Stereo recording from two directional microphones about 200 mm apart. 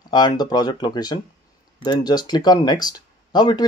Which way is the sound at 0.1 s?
20° left (ahead or behind).